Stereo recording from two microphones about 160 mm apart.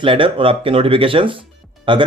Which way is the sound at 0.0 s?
30° right (ahead or behind).